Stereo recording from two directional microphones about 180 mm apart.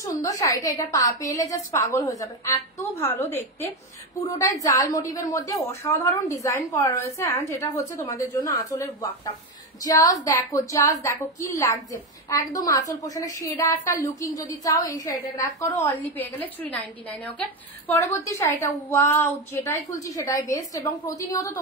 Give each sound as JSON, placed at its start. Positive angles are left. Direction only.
{"t": 0.2, "sound": "a woman's voice", "side_deg": 20}